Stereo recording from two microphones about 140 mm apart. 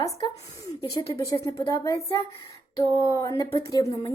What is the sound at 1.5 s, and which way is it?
A woman's voice, 25° left (ahead or behind).